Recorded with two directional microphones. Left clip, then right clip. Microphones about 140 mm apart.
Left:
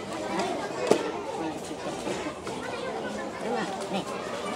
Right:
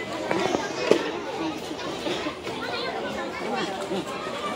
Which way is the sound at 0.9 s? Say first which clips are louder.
Right 3 dB; 50° left (ahead or behind).